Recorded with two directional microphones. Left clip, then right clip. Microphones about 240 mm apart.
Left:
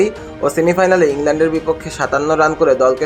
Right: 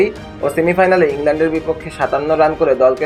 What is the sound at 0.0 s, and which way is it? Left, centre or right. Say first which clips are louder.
A man's voice: even; centre.